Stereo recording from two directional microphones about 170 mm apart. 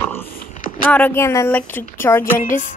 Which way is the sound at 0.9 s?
10° left (ahead or behind).